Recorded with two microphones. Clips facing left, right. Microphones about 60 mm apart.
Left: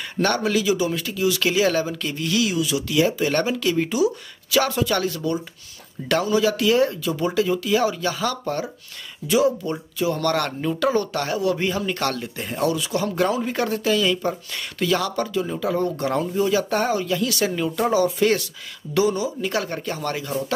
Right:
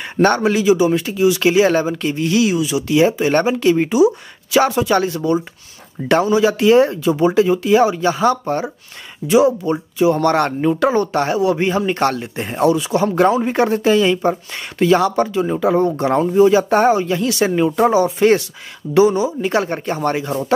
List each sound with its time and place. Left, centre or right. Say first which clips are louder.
0.2 s speech: right 7 dB; right